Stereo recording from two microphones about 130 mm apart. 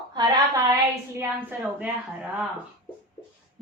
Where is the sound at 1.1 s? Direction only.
15° right (ahead or behind).